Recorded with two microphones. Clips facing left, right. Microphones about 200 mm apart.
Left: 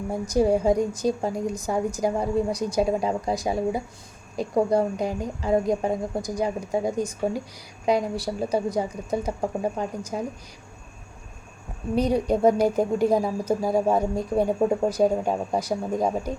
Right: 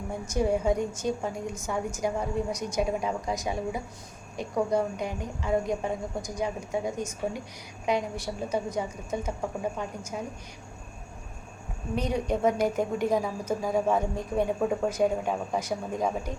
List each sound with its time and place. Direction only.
0.1 s a woman's voice: 35° left (ahead or behind)
11.9 s a woman's voice: 35° left (ahead or behind)